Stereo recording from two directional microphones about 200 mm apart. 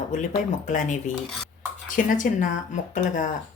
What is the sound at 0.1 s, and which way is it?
A woman's voice, 40° left (ahead or behind).